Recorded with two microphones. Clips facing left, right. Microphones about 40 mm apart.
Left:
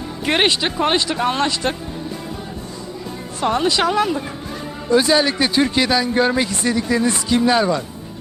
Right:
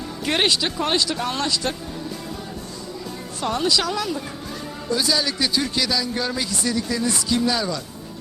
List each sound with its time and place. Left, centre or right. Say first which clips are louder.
0.3 s a man's voice: left 4 dB; left
3.4 s a man's voice: left 5 dB; left